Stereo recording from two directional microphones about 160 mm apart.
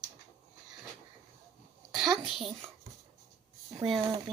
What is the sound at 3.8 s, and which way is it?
Speech, 25° right (ahead or behind).